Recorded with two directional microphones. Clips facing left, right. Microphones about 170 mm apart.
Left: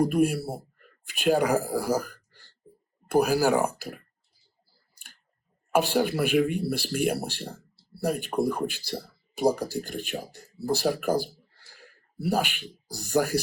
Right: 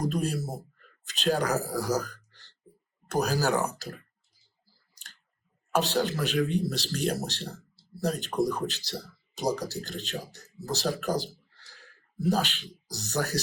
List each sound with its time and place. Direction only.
0.1 s speech: 10° left (ahead or behind)
5.7 s speech: 10° left (ahead or behind)
10.4 s speech: 35° left (ahead or behind)
10.7 s speech: 10° left (ahead or behind)
11.5 s a sound: 10° left (ahead or behind)
12.2 s speech: 10° left (ahead or behind)